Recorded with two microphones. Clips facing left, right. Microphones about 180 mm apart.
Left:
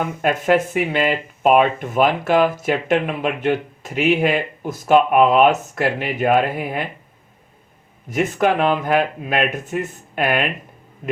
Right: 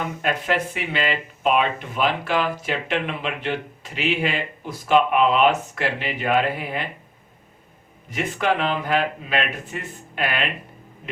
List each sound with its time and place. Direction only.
0.0 s speech: 50° left (ahead or behind)
8.1 s speech: 45° left (ahead or behind)